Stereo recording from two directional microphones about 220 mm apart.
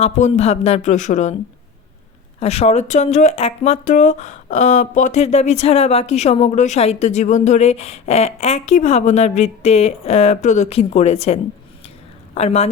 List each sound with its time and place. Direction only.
0.0 s speech: 30° left (ahead or behind)
2.4 s speech: 30° left (ahead or behind)